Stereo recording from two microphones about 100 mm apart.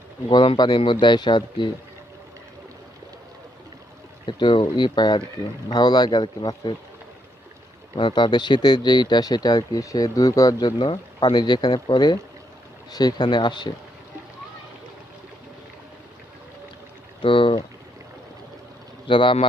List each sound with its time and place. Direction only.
0.3 s speech: 50° left (ahead or behind)
4.3 s speech: 55° left (ahead or behind)
7.9 s speech: 55° left (ahead or behind); by 10.8 s 35° left (ahead or behind)
10.8 s speech: 55° left (ahead or behind)
17.2 s a man's voice: 60° left (ahead or behind)
19.0 s a man's voice: 55° left (ahead or behind)